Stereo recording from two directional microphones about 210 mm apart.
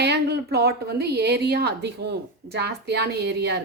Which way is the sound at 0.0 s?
50° right (ahead or behind).